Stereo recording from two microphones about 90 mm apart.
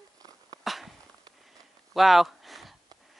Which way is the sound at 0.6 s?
Centre (ahead or behind).